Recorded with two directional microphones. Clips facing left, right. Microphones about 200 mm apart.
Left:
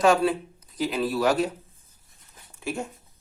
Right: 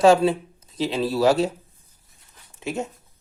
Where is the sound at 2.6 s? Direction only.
20° right (ahead or behind).